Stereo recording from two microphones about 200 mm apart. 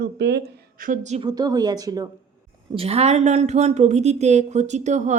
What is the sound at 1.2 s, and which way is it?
Speech, 20° right (ahead or behind).